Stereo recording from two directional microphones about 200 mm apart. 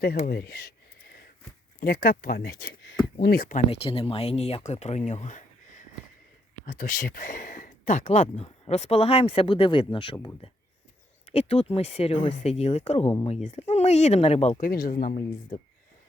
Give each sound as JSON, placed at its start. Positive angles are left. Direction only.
{"t": 0.3, "sound": "speech", "side_deg": 50}
{"t": 1.8, "sound": "speech", "side_deg": 50}
{"t": 3.7, "sound": "speech", "side_deg": 25}
{"t": 14.6, "sound": "speech", "side_deg": 45}